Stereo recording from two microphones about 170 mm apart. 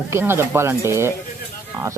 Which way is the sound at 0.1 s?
15° right (ahead or behind).